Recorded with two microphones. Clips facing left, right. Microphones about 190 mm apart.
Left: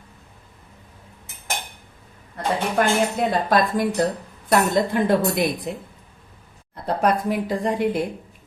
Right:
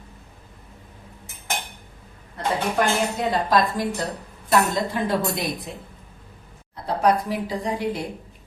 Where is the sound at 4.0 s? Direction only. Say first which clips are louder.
Left 7 dB; 55° left (ahead or behind).